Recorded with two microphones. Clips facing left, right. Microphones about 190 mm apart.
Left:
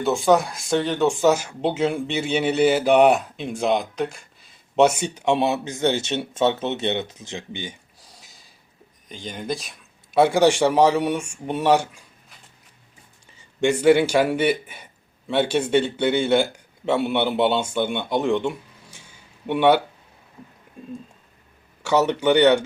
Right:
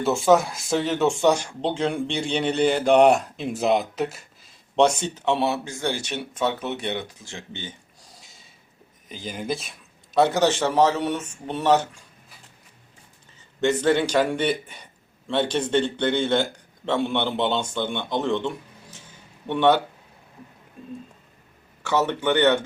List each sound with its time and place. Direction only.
0.0 s speech: centre (ahead or behind)
8.0 s a sound: centre (ahead or behind)
9.0 s speech: 5° right (ahead or behind)
10.2 s speech: 10° left (ahead or behind)
13.6 s speech: 10° left (ahead or behind)
21.8 s speech: 10° left (ahead or behind)